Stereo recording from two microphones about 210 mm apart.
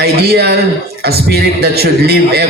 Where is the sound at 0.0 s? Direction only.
50° right (ahead or behind).